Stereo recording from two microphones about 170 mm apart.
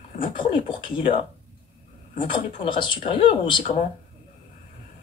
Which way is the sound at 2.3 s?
30° left (ahead or behind).